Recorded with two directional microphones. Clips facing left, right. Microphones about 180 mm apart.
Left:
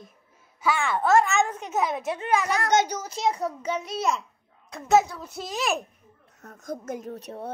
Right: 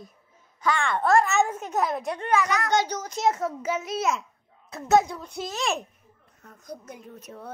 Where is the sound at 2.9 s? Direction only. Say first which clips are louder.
Even; 10° left (ahead or behind).